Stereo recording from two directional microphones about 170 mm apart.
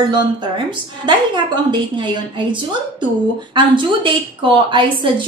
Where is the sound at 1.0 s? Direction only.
25° right (ahead or behind).